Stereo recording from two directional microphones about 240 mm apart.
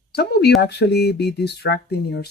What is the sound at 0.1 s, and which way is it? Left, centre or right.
Speech, left.